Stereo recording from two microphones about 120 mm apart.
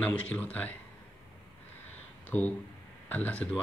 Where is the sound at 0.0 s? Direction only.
15° left (ahead or behind).